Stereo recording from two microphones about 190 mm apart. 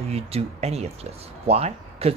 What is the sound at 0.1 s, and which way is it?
A woman's voice, 35° right (ahead or behind).